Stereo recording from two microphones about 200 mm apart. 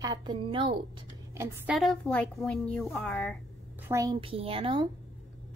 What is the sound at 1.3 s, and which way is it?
Speech, 15° right (ahead or behind).